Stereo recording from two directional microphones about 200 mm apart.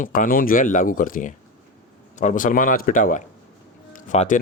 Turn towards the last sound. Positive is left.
turn(degrees=40)  # may be behind; listen again after turning